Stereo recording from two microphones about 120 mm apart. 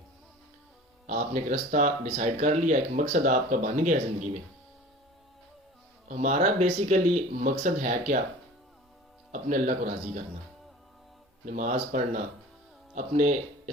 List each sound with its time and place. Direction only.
1.0 s speech: 90° right
6.1 s speech: 85° right
9.3 s speech: 90° right
11.4 s speech: 90° right